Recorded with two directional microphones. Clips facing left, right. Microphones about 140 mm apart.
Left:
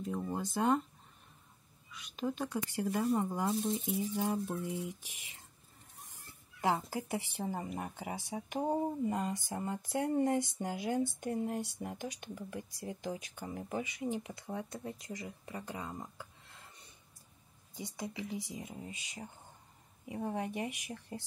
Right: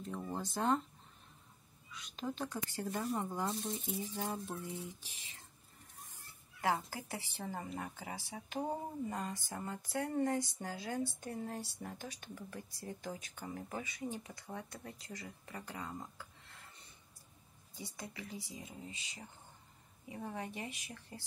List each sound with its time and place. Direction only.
0.0 s speech: 10° left (ahead or behind)
1.9 s speech: 5° left (ahead or behind)
6.6 s speech: 20° left (ahead or behind)
17.7 s speech: 20° left (ahead or behind)